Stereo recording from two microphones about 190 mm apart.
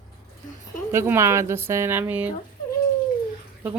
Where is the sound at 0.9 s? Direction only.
15° right (ahead or behind).